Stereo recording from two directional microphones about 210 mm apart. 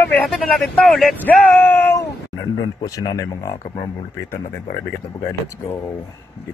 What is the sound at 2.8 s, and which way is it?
Speech, 15° left (ahead or behind).